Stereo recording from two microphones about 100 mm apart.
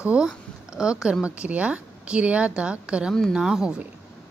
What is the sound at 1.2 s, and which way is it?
Speech, 10° right (ahead or behind).